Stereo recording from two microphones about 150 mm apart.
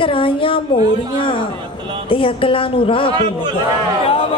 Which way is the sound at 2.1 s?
35° left (ahead or behind).